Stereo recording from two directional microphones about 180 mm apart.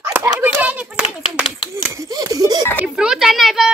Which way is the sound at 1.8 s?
20° right (ahead or behind).